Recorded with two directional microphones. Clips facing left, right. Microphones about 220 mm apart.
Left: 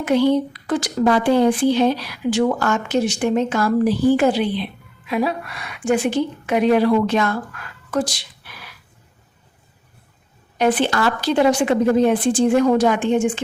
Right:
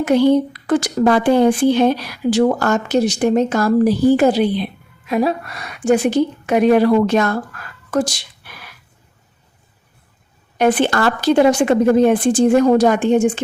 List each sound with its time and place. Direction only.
0.0 s a woman's voice: 45° right (ahead or behind)
10.6 s a woman's voice: 50° right (ahead or behind)